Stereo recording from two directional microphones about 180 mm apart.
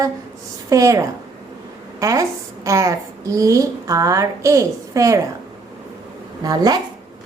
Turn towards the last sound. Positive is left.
turn(degrees=-20)  # may be behind; listen again after turning